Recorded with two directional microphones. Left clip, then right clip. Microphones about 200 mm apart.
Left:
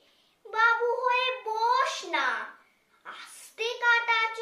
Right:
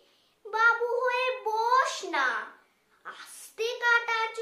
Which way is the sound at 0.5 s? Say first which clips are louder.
Even; 20° right (ahead or behind).